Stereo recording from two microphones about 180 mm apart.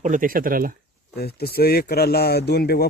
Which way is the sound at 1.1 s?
60° left (ahead or behind).